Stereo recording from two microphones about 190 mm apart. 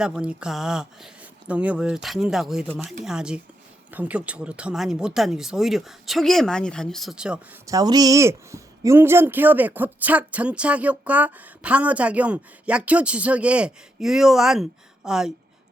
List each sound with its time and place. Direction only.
0.0 s speech: 5° right (ahead or behind)
7.7 s speech: 20° right (ahead or behind); by 15.3 s 5° right (ahead or behind)